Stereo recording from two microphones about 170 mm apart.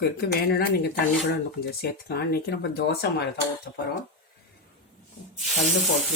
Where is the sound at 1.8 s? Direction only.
65° left (ahead or behind).